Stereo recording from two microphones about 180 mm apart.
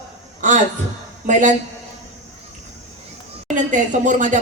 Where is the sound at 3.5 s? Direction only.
45° right (ahead or behind).